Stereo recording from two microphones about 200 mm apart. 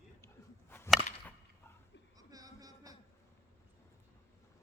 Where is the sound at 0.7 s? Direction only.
10° left (ahead or behind).